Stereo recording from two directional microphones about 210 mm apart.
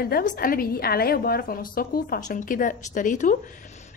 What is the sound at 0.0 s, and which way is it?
A woman's voice, 45° left (ahead or behind).